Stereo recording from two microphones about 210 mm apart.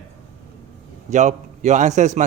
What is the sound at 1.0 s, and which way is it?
A man's voice, 35° right (ahead or behind).